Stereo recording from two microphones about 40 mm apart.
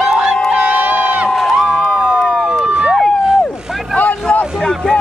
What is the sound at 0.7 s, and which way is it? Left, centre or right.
Crowd, right.